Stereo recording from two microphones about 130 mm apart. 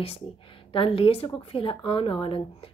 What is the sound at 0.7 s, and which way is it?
A woman's voice, 45° left (ahead or behind).